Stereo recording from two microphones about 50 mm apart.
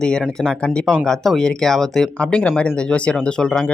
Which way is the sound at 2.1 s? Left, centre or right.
Left.